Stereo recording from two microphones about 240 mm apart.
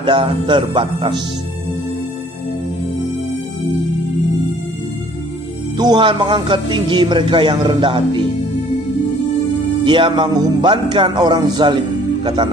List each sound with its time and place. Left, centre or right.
0.0 s a man's voice: centre
5.8 s a man's voice: centre
9.8 s a man's voice: centre